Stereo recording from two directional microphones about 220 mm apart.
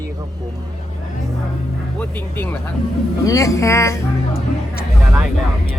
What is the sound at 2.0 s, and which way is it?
A woman's voice, 10° left (ahead or behind).